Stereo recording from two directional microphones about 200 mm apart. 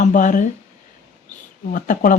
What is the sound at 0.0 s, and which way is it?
Speech, 40° left (ahead or behind).